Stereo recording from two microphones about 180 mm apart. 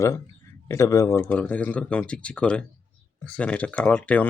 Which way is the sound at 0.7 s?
15° left (ahead or behind).